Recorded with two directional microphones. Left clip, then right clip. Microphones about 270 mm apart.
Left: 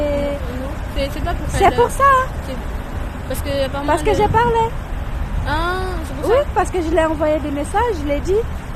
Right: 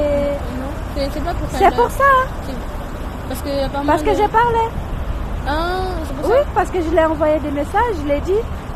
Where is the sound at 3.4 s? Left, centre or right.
Left.